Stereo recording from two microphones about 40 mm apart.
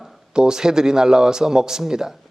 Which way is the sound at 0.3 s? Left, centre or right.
Centre.